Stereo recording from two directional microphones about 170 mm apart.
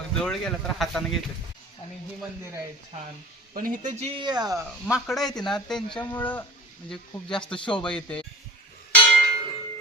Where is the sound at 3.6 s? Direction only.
55° right (ahead or behind).